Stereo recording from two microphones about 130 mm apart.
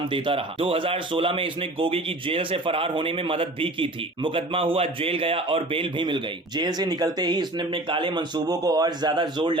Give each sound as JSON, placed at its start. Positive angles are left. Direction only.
{"t": 0.1, "sound": "speech", "side_deg": -45}